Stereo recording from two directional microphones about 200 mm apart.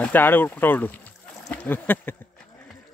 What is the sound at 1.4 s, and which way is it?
Speech, 10° left (ahead or behind).